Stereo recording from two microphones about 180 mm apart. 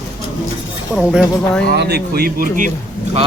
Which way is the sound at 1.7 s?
65° right (ahead or behind).